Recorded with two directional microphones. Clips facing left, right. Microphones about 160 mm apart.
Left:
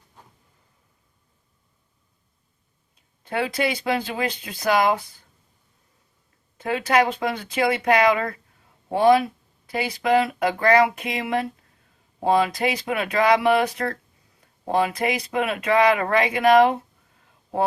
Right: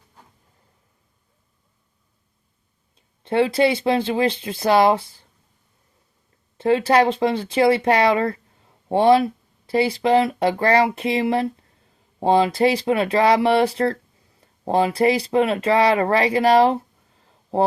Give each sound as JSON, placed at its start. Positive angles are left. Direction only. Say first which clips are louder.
{"t": 2.9, "sound": "speech", "louder": "right 7 dB", "side_deg": -25}
{"t": 6.6, "sound": "speech", "louder": "right 4 dB", "side_deg": -30}